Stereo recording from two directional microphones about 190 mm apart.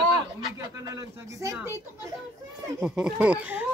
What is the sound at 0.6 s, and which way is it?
Speech, 20° right (ahead or behind).